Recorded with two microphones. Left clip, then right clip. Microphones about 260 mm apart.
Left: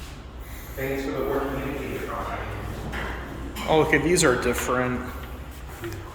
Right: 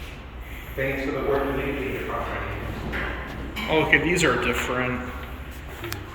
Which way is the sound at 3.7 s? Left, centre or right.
Centre.